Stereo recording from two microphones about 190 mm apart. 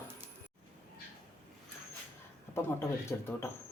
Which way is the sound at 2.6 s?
15° left (ahead or behind).